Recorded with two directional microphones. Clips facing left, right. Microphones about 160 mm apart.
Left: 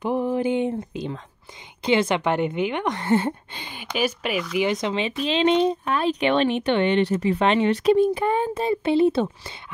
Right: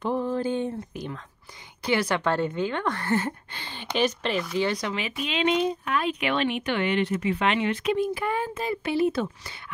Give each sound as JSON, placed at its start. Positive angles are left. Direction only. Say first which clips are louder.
{"t": 0.0, "sound": "a woman's voice", "louder": "left 3 dB", "side_deg": 15}